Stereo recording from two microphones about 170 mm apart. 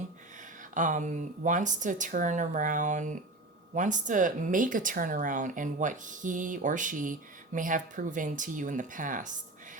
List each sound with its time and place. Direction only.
0.7 s speech: 50° right (ahead or behind)